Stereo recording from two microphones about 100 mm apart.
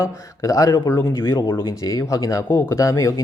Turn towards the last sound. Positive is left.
turn(degrees=30)  # may be behind; listen again after turning